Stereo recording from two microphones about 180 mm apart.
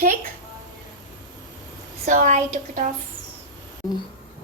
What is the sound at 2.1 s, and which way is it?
Speech, 45° right (ahead or behind).